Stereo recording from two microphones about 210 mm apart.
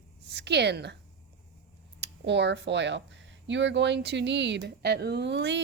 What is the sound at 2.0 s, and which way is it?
Speech, 55° right (ahead or behind).